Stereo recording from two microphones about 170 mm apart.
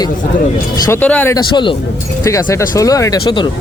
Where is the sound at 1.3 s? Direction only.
30° left (ahead or behind).